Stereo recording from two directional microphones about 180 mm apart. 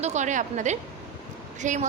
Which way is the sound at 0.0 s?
40° right (ahead or behind).